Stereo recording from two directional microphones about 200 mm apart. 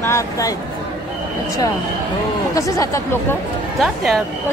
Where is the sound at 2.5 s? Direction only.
15° left (ahead or behind).